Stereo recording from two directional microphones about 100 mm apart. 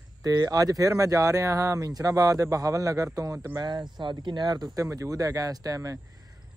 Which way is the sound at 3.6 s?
45° right (ahead or behind).